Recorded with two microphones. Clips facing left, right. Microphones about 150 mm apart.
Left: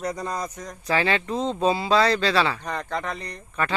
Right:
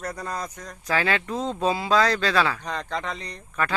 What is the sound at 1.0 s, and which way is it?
Speech, centre (ahead or behind).